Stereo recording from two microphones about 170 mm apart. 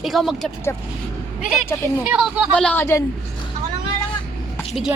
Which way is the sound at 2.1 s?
Centre (ahead or behind).